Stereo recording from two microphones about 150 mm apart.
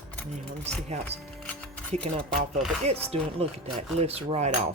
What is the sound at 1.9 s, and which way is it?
Cutlery, 50° right (ahead or behind).